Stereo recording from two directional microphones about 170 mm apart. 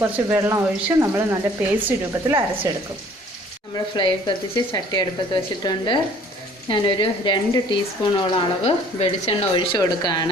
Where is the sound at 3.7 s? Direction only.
30° left (ahead or behind).